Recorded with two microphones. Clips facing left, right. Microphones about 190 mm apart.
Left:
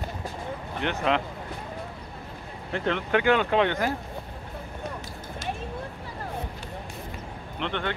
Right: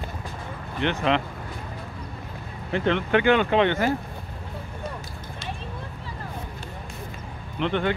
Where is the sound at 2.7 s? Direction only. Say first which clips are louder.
Right 3 dB; centre (ahead or behind).